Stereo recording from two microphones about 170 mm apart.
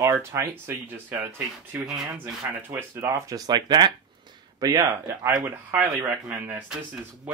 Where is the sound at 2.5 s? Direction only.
15° right (ahead or behind).